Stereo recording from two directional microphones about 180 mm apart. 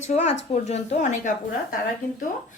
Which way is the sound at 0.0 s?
40° left (ahead or behind).